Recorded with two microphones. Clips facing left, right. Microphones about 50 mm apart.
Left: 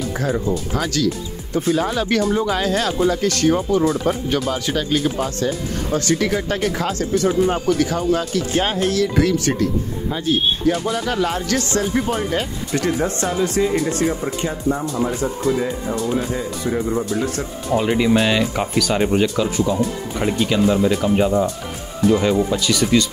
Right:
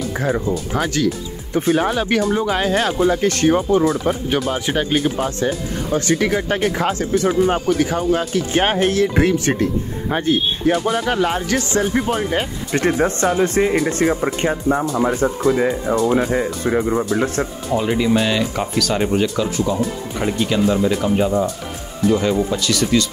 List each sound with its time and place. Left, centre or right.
0.7 s speech: right
2.0 s speech: centre
3.9 s speech: centre
4.5 s speech: right
8.5 s speech: right
10.0 s speech: right
10.8 s speech: right
12.7 s speech: right
17.7 s speech: centre